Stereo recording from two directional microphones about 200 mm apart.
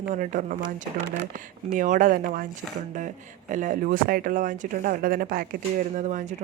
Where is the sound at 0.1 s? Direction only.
40° right (ahead or behind).